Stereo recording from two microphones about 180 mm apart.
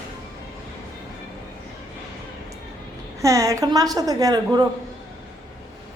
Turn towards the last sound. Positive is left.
turn(degrees=-20)  # may be behind; listen again after turning